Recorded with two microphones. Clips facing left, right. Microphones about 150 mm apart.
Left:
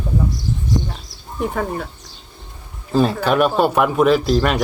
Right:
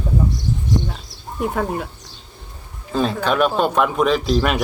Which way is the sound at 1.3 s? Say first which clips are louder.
Even; 5° right (ahead or behind).